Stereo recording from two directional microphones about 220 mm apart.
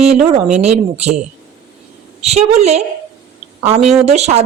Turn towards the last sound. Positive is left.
turn(degrees=-30)  # may be behind; listen again after turning